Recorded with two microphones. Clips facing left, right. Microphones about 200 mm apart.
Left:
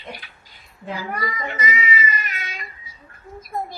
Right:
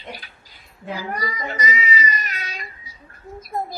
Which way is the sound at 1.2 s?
40° right (ahead or behind).